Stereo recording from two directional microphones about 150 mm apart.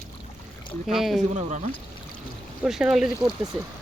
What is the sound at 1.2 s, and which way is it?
Speech, 50° right (ahead or behind).